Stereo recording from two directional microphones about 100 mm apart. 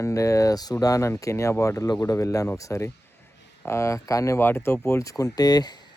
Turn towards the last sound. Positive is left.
turn(degrees=40)  # may be behind; listen again after turning